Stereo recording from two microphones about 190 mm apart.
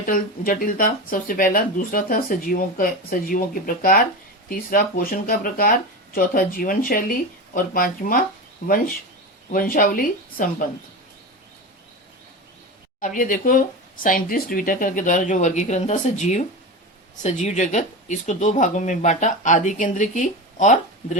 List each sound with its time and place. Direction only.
0.0 s speech: 45° left (ahead or behind)
13.0 s speech: 45° left (ahead or behind)